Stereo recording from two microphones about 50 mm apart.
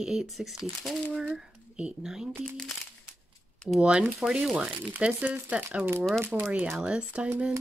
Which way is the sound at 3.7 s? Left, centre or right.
Centre.